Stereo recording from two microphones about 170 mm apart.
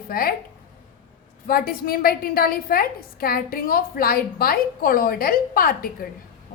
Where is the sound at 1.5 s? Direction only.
60° left (ahead or behind).